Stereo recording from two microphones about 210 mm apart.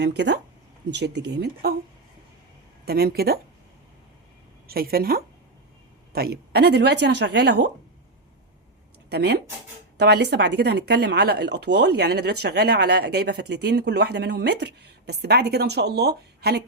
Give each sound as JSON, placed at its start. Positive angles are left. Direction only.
{"t": 0.0, "sound": "speech", "side_deg": -55}
{"t": 2.8, "sound": "speech", "side_deg": -45}
{"t": 4.7, "sound": "speech", "side_deg": -45}
{"t": 9.0, "sound": "speech", "side_deg": -50}